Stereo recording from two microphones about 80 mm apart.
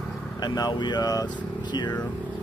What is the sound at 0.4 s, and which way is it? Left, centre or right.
Speech, left.